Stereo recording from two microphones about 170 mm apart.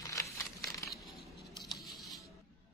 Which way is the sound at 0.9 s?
Centre (ahead or behind).